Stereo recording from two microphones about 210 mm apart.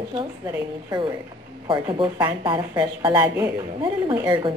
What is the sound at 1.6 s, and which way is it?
Speech, 20° right (ahead or behind).